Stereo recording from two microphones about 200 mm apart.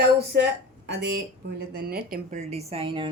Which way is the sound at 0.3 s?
60° right (ahead or behind).